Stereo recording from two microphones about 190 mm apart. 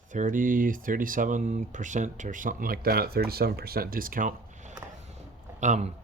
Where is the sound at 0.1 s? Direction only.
40° right (ahead or behind).